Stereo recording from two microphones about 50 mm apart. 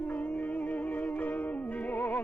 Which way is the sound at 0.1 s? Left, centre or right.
Left.